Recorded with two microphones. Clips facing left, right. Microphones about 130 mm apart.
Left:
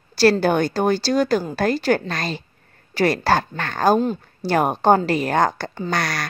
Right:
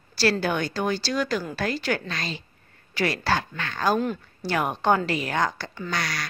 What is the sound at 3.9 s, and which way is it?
Speech, 30° left (ahead or behind).